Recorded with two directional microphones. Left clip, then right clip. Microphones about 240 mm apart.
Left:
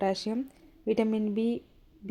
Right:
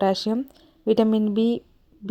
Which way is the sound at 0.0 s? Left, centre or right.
Right.